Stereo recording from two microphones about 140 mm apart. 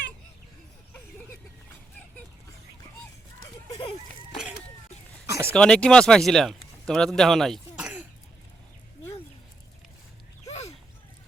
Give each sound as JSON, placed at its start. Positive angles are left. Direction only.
{"t": 5.2, "sound": "a sound", "side_deg": -20}
{"t": 5.5, "sound": "speech", "side_deg": 5}
{"t": 7.8, "sound": "cough", "side_deg": -5}